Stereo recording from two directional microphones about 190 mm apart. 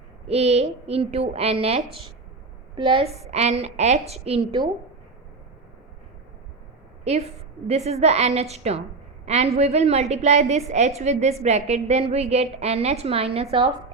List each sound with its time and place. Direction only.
0.3 s a woman's voice: 35° right (ahead or behind)
7.0 s a woman's voice: 35° right (ahead or behind)